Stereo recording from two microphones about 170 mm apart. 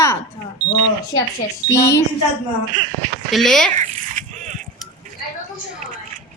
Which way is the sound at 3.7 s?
50° right (ahead or behind).